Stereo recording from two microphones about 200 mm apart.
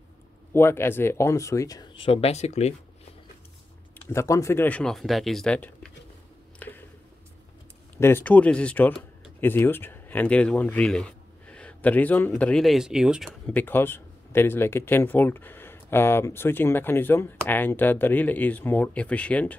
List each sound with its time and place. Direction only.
0.5 s speech: 10° left (ahead or behind); by 2.7 s 35° left (ahead or behind)
4.1 s speech: 15° left (ahead or behind)
6.6 s a sound: 5° left (ahead or behind)
8.0 s speech: 10° left (ahead or behind)
13.5 s speech: 10° left (ahead or behind)